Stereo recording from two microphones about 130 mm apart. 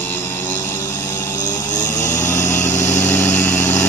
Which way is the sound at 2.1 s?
75° left (ahead or behind).